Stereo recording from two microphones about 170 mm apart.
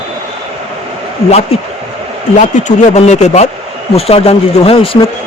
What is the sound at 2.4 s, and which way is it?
Speech, 45° left (ahead or behind).